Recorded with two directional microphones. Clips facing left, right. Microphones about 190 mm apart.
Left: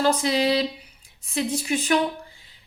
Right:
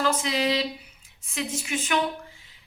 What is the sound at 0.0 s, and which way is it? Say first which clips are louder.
A woman's voice: left 4 dB; 35° left (ahead or behind).